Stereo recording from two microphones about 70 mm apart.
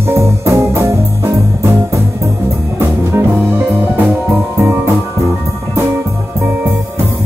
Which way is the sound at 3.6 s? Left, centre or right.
Right.